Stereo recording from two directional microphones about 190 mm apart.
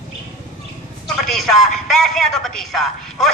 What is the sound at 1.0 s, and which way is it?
A man's voice, centre (ahead or behind).